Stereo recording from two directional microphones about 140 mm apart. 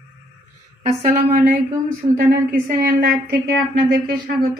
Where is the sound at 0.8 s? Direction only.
60° right (ahead or behind).